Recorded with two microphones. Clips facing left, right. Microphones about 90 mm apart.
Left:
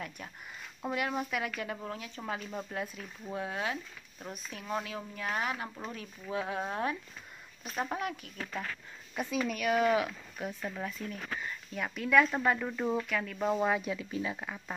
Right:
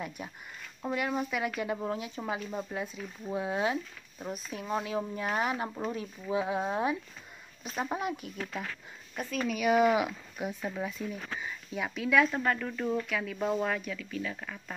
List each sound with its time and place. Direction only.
0.2 s speech: 10° right (ahead or behind)
0.8 s speech: 5° left (ahead or behind); by 3.8 s 20° right (ahead or behind)
4.2 s speech: 5° right (ahead or behind)
4.5 s speech: 15° right (ahead or behind)
7.6 s speech: centre (ahead or behind)
9.6 s speech: 10° right (ahead or behind); by 13.8 s 10° left (ahead or behind)
13.8 s speech: 25° left (ahead or behind)